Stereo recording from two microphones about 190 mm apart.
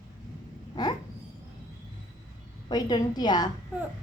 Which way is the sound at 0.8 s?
20° left (ahead or behind).